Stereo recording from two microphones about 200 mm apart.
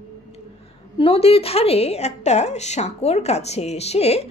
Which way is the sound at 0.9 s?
30° left (ahead or behind).